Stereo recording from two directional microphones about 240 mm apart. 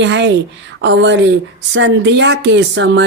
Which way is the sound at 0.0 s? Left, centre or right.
Right.